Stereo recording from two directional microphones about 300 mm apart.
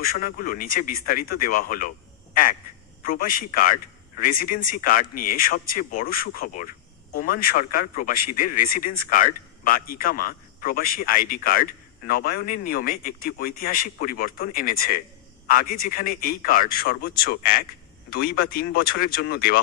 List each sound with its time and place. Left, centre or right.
0.0 s a man's voice: left
2.3 s quack: left
3.0 s a man's voice: left